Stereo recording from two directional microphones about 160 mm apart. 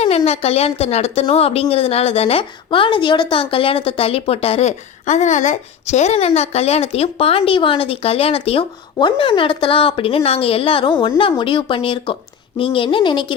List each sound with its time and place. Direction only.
0.3 s a woman's voice: 40° left (ahead or behind)